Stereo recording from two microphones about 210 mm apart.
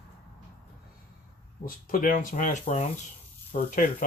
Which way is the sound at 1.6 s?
40° left (ahead or behind).